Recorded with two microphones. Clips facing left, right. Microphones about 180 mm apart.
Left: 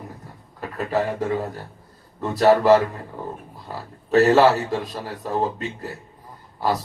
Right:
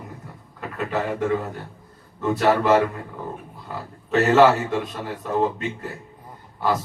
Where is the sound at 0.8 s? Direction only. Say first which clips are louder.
Left 1 dB; 35° left (ahead or behind).